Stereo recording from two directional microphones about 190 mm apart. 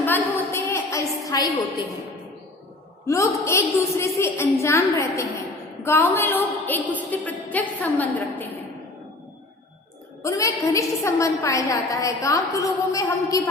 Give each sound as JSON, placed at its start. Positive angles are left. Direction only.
{"t": 0.0, "sound": "a sound", "side_deg": 10}
{"t": 3.1, "sound": "a woman's voice", "side_deg": 15}
{"t": 10.2, "sound": "a woman's voice", "side_deg": 15}